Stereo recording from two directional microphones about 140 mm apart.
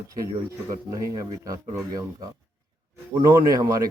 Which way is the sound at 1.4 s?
25° right (ahead or behind).